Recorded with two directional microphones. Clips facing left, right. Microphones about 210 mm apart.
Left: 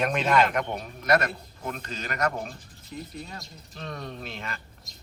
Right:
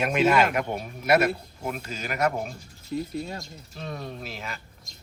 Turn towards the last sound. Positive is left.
turn(degrees=-5)  # may be behind; listen again after turning